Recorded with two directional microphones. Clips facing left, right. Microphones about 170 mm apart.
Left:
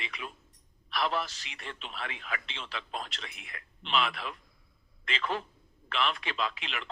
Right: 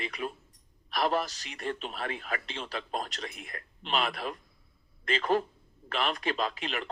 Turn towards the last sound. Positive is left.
turn(degrees=-40)  # may be behind; listen again after turning